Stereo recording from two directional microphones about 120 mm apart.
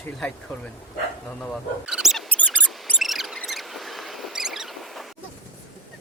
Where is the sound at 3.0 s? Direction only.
Centre (ahead or behind).